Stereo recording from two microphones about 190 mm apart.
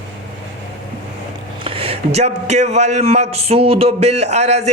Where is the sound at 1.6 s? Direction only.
30° right (ahead or behind).